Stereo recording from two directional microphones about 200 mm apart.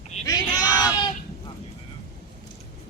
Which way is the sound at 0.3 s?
20° left (ahead or behind).